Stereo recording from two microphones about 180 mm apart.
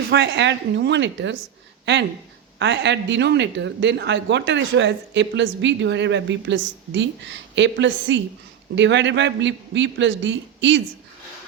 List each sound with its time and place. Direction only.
0.1 s speech: 80° right